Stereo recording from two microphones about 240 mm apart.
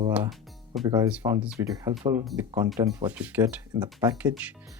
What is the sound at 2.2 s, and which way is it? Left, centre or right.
Speech, centre.